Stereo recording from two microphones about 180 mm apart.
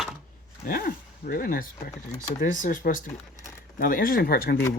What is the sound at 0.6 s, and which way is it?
Speech, 55° left (ahead or behind).